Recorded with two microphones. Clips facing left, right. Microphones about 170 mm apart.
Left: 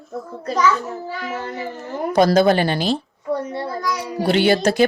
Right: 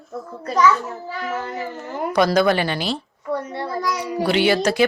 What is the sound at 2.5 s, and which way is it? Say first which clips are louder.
Speech: left 3 dB; 40° left (ahead or behind).